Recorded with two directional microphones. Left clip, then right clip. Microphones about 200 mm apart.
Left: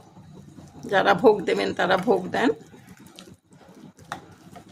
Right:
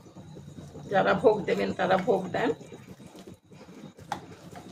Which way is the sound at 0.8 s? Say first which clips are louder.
Left 5 dB; 60° left (ahead or behind).